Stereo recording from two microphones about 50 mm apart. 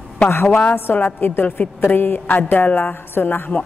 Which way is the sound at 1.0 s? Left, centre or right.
Left.